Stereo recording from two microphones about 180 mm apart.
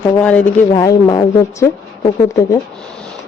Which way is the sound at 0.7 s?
20° left (ahead or behind).